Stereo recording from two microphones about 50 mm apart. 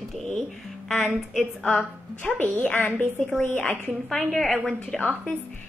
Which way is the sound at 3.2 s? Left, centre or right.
Centre.